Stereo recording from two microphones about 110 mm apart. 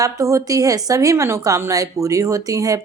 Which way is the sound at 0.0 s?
30° right (ahead or behind).